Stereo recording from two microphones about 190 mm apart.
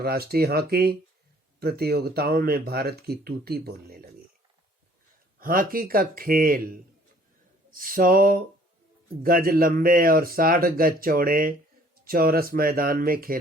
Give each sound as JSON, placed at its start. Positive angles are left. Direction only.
{"t": 0.0, "sound": "speech", "side_deg": -55}
{"t": 5.4, "sound": "a man's voice", "side_deg": -50}
{"t": 7.7, "sound": "a man's voice", "side_deg": -45}